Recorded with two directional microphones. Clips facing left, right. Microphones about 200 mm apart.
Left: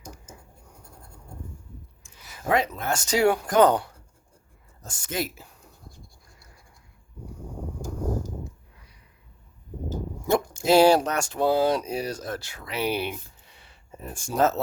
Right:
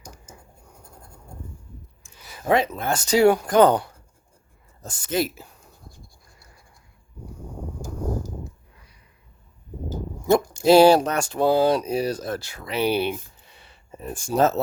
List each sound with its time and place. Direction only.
2.1 s speech: 30° right (ahead or behind)
10.2 s speech: 40° right (ahead or behind)
14.3 s speech: 30° right (ahead or behind)